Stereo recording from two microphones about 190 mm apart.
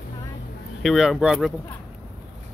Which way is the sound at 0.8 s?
Centre (ahead or behind).